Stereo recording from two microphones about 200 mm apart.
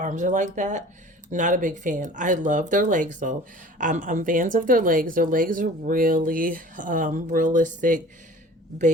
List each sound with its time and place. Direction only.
0.0 s a woman's voice: 40° right (ahead or behind)